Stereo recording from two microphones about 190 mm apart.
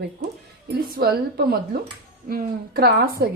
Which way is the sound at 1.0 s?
55° right (ahead or behind).